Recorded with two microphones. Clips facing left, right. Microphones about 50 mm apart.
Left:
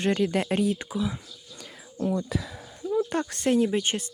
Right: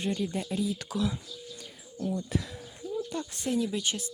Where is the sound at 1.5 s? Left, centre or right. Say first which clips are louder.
Left 5 dB; left.